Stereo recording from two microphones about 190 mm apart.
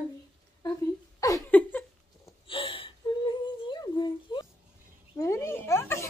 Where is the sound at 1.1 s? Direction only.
15° left (ahead or behind).